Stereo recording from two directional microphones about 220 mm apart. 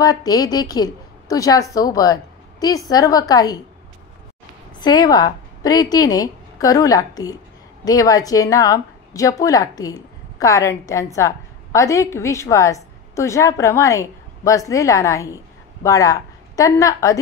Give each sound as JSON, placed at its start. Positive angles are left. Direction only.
{"t": 0.0, "sound": "a woman's voice", "side_deg": 15}
{"t": 4.7, "sound": "a woman's voice", "side_deg": 20}